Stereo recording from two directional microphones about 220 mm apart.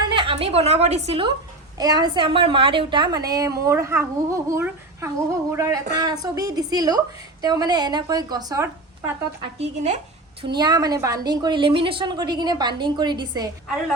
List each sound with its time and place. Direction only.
0.1 s a woman's voice: 25° right (ahead or behind)
9.6 s speech: 30° right (ahead or behind)
10.4 s a woman's voice: 20° right (ahead or behind)